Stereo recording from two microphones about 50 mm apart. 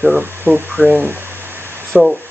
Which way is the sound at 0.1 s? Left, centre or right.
Right.